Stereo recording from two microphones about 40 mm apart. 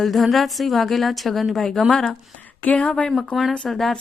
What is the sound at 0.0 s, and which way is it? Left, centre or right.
A woman's voice, centre.